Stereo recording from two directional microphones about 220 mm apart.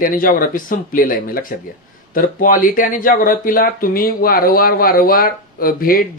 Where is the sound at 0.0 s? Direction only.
40° left (ahead or behind).